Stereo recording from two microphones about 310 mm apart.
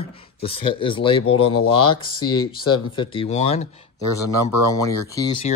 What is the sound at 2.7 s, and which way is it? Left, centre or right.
Speech, centre.